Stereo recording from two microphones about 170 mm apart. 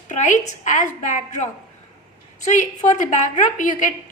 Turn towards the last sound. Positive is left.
turn(degrees=50)  # may be behind; listen again after turning